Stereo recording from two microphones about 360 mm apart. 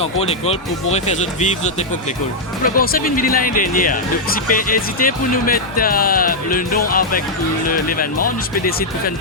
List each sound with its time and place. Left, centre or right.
0.0 s speech: centre
2.7 s speech: left